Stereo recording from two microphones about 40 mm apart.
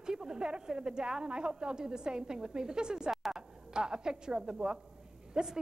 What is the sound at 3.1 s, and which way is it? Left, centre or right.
Music, centre.